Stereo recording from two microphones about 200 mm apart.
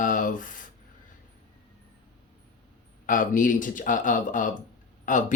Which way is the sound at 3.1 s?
40° left (ahead or behind).